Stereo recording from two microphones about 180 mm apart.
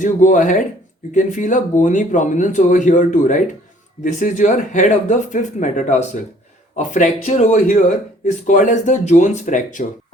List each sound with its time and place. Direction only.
0.0 s speech: 45° left (ahead or behind)